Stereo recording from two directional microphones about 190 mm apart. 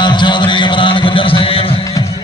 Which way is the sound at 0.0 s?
25° left (ahead or behind).